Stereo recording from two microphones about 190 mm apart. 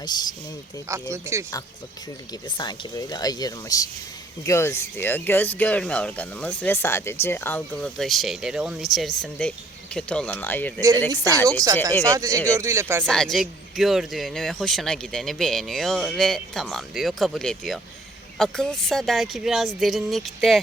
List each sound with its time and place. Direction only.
0.0 s speech: 20° left (ahead or behind)
1.1 s speech: 15° right (ahead or behind)
2.6 s speech: 20° left (ahead or behind)
10.8 s speech: 15° right (ahead or behind)
13.1 s speech: centre (ahead or behind)